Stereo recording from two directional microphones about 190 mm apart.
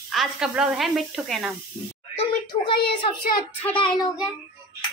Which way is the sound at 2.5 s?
25° left (ahead or behind).